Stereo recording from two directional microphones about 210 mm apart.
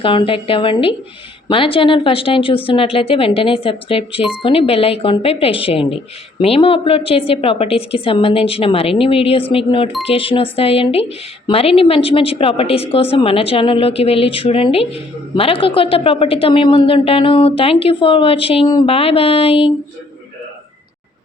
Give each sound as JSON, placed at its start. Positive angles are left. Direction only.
{"t": 0.0, "sound": "a woman's voice", "side_deg": 25}